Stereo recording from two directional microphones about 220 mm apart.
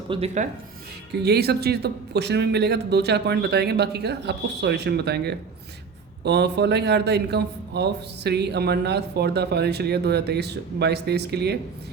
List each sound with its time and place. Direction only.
0.1 s speech: 25° right (ahead or behind)
1.1 s a man's voice: 50° right (ahead or behind)